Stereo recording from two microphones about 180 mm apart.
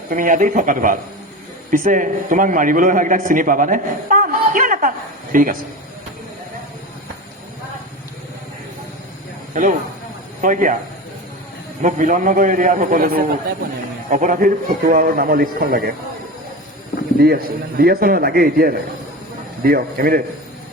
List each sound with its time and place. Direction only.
0.1 s a man's voice: 45° right (ahead or behind)
9.5 s a man's voice: 45° right (ahead or behind)
11.8 s a man's voice: 45° right (ahead or behind)
17.2 s a man's voice: 60° right (ahead or behind)